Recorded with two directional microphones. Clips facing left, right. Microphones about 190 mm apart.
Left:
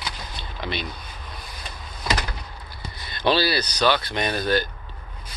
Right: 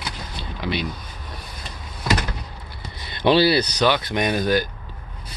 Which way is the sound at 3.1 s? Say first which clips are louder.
Right 5 dB; 20° right (ahead or behind).